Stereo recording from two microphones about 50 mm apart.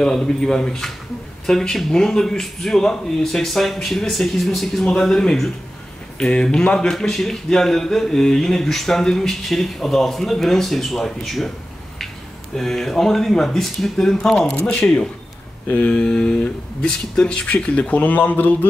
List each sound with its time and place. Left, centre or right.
0.0 s speech: centre
12.5 s speech: centre
14.1 s speech: centre; by 18.7 s left